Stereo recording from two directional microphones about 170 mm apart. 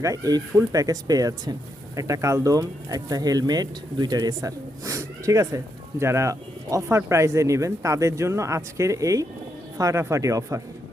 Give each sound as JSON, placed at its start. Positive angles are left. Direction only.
{"t": 0.0, "sound": "speech", "side_deg": -20}